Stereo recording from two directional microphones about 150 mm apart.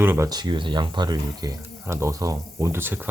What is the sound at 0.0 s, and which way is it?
Speech, 15° right (ahead or behind).